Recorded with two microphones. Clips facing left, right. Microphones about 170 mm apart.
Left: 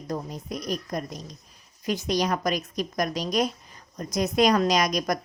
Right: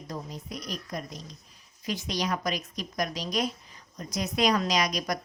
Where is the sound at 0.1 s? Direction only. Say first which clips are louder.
Left 6 dB; 50° left (ahead or behind).